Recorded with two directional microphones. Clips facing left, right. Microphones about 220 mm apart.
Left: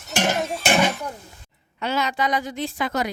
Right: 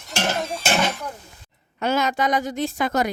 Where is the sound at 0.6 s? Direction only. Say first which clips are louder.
Left 3 dB; 15° left (ahead or behind).